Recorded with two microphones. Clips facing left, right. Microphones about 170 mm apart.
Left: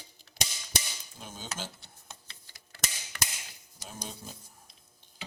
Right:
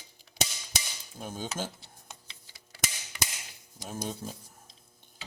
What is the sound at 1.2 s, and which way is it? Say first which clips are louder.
Dishes: right 6 dB; 50° right (ahead or behind).